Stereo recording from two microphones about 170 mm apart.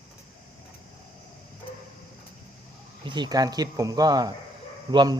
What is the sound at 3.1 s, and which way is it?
Speech, 25° right (ahead or behind).